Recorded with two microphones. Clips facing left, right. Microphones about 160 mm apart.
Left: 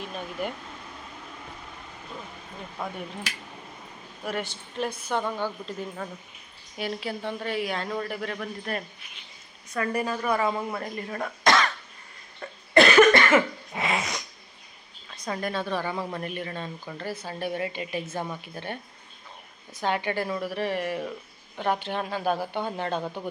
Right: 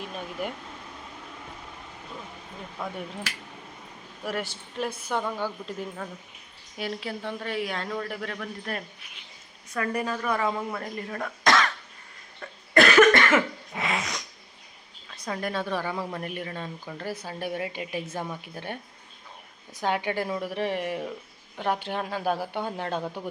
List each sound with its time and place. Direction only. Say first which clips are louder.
0.0 s speech: left 1 dB; centre (ahead or behind)
4.2 s a woman's voice: even; 5° right (ahead or behind)
6.7 s speech: left 1 dB; centre (ahead or behind)
12.7 s cough: left 1 dB; 20° left (ahead or behind)
13.1 s cough: left 1 dB; centre (ahead or behind)
15.1 s a woman's voice: even; 5° right (ahead or behind)